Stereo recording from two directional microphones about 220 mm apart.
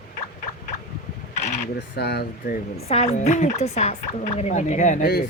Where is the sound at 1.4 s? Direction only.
35° left (ahead or behind).